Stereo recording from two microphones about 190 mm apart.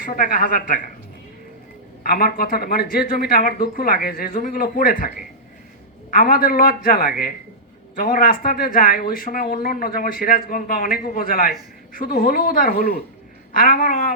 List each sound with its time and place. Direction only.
0.0 s speech: 45° left (ahead or behind)
2.0 s speech: 50° left (ahead or behind)